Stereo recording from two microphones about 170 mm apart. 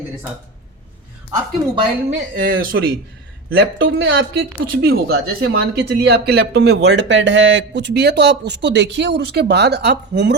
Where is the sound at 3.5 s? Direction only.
70° right (ahead or behind).